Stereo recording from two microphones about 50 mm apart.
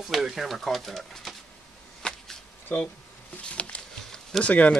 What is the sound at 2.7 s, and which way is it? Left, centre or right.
Speech, left.